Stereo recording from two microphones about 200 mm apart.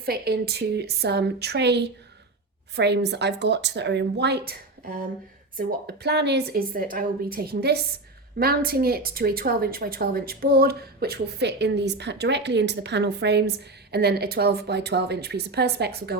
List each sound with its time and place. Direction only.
0.0 s speech: 50° right (ahead or behind)
5.5 s speech: 55° right (ahead or behind)